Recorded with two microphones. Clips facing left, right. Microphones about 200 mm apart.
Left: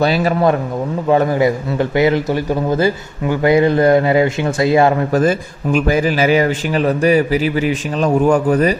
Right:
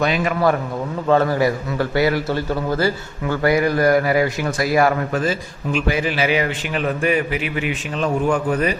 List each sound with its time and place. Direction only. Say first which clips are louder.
0.0 s a man's voice: left 5 dB; 35° left (ahead or behind)
1.0 s a man's voice: left 3 dB; 15° left (ahead or behind)
5.1 s a man's voice: left 7 dB; 45° left (ahead or behind)